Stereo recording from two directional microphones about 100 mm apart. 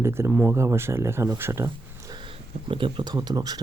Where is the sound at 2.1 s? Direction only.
60° right (ahead or behind); by 3.6 s 40° right (ahead or behind).